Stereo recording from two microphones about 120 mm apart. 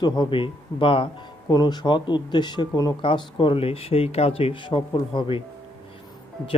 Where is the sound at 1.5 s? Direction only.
35° left (ahead or behind).